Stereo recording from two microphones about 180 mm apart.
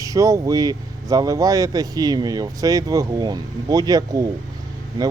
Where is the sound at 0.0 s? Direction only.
20° right (ahead or behind).